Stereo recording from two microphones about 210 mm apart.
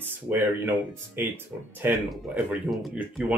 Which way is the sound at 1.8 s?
5° right (ahead or behind).